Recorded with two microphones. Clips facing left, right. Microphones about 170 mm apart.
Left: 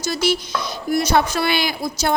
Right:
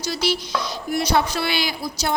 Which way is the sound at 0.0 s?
50° left (ahead or behind).